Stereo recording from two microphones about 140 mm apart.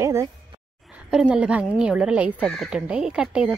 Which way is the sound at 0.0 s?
20° right (ahead or behind).